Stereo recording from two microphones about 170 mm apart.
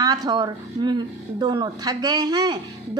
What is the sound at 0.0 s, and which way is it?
A woman's voice, 20° right (ahead or behind).